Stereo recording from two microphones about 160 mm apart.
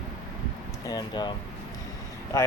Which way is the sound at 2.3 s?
15° left (ahead or behind).